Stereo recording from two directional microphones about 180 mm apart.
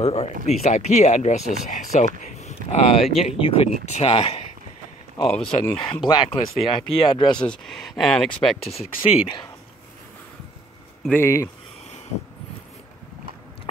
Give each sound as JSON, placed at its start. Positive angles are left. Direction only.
{"t": 0.0, "sound": "speech", "side_deg": 35}
{"t": 2.2, "sound": "a sound", "side_deg": 40}
{"t": 3.1, "sound": "speech", "side_deg": 35}
{"t": 5.2, "sound": "speech", "side_deg": 5}
{"t": 5.8, "sound": "speech", "side_deg": 30}
{"t": 7.4, "sound": "speech", "side_deg": 0}
{"t": 8.5, "sound": "speech", "side_deg": 35}
{"t": 11.1, "sound": "speech", "side_deg": 15}